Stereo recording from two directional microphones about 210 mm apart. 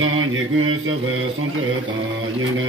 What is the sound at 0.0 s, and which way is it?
Mantra, 75° right (ahead or behind).